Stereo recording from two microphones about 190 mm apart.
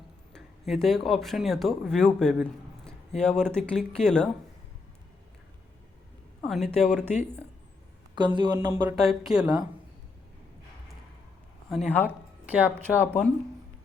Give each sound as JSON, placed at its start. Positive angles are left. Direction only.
{"t": 0.3, "sound": "speech", "side_deg": 0}
{"t": 6.4, "sound": "speech", "side_deg": 0}
{"t": 8.1, "sound": "speech", "side_deg": -25}
{"t": 8.5, "sound": "a sound", "side_deg": -15}
{"t": 9.0, "sound": "speech", "side_deg": 0}
{"t": 11.7, "sound": "speech", "side_deg": 0}
{"t": 12.5, "sound": "a sound", "side_deg": -10}
{"t": 12.9, "sound": "speech", "side_deg": 10}